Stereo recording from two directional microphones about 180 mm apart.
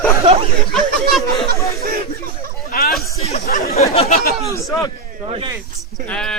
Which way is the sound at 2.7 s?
55° left (ahead or behind).